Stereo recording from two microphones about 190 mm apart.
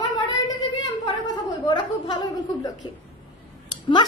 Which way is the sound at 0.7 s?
20° left (ahead or behind).